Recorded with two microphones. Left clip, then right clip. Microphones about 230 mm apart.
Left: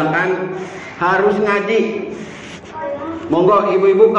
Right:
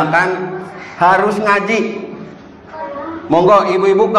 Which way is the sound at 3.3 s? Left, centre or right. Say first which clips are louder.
Right 3 dB; right.